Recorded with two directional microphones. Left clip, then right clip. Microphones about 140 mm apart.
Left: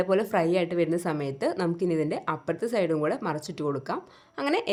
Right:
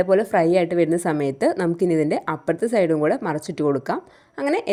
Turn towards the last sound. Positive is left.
turn(degrees=-35)  # may be behind; listen again after turning